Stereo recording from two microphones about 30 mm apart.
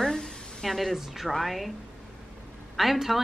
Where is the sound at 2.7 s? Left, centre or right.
Centre.